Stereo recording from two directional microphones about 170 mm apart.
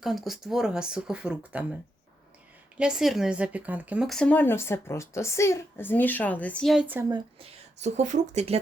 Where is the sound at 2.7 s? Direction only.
5° right (ahead or behind).